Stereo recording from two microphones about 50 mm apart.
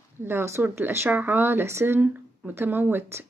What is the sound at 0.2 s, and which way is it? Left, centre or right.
Speech, right.